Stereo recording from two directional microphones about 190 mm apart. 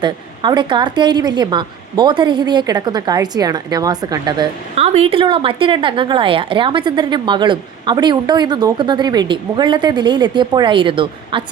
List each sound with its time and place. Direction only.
0.0 s a woman's voice: 25° right (ahead or behind)